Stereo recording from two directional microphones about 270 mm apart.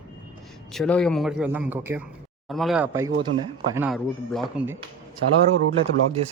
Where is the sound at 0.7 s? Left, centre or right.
Centre.